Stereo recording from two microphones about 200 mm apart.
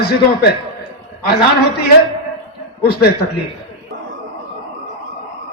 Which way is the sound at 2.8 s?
50° left (ahead or behind).